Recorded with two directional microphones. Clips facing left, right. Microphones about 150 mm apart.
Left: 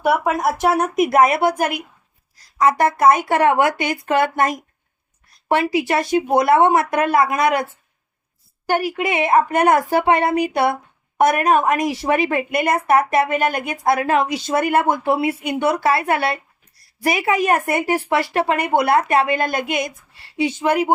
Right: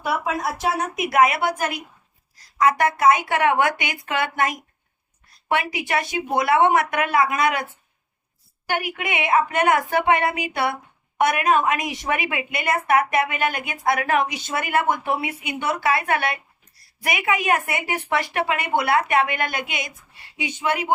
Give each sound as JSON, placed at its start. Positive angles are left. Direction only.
{"t": 0.0, "sound": "speech", "side_deg": 55}
{"t": 0.9, "sound": "a woman's voice", "side_deg": 40}
{"t": 12.3, "sound": "a woman's voice", "side_deg": 45}
{"t": 14.4, "sound": "a woman's voice", "side_deg": 45}
{"t": 14.8, "sound": "a woman's voice", "side_deg": 30}
{"t": 15.4, "sound": "a woman's voice", "side_deg": 40}
{"t": 18.1, "sound": "a woman's voice", "side_deg": 30}